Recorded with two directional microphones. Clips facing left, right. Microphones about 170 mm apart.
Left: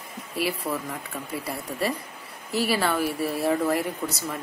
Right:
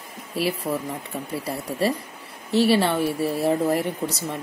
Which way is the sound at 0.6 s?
30° right (ahead or behind).